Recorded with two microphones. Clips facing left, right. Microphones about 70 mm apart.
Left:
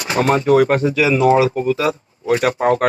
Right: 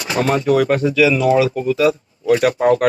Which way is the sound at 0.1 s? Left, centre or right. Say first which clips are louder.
Left 2 dB; left.